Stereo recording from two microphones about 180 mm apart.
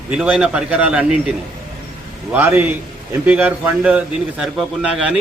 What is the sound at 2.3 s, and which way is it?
A man's voice, 10° right (ahead or behind).